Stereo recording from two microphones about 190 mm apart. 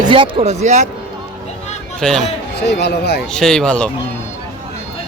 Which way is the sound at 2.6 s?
60° left (ahead or behind).